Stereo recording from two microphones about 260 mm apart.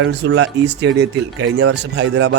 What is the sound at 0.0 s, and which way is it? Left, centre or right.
Speech, right.